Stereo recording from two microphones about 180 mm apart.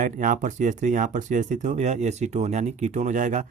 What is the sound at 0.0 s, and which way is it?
Speech, 45° right (ahead or behind).